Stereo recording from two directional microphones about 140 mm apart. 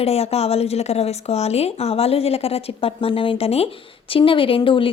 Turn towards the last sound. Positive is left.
turn(degrees=35)  # may be behind; listen again after turning